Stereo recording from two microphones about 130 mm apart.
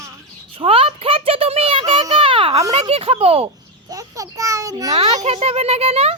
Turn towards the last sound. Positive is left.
turn(degrees=-50)  # may be behind; listen again after turning